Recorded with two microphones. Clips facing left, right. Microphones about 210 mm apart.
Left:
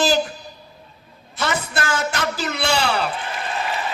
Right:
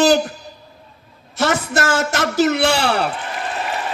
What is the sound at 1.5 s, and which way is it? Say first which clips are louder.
A man's voice: right 4 dB; 75° right (ahead or behind).